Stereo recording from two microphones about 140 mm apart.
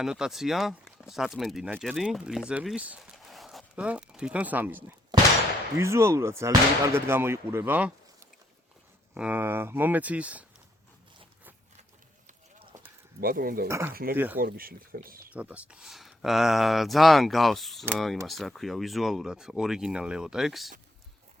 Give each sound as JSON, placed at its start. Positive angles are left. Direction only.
{"t": 0.0, "sound": "speech", "side_deg": -5}
{"t": 3.2, "sound": "a sound", "side_deg": 0}
{"t": 5.8, "sound": "speech", "side_deg": -20}
{"t": 9.1, "sound": "speech", "side_deg": -10}
{"t": 13.1, "sound": "speech", "side_deg": -90}
{"t": 13.7, "sound": "speech", "side_deg": -20}
{"t": 13.9, "sound": "speech", "side_deg": -90}
{"t": 15.3, "sound": "speech", "side_deg": -10}